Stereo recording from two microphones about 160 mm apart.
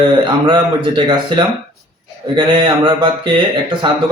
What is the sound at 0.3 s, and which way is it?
Speech, 30° right (ahead or behind).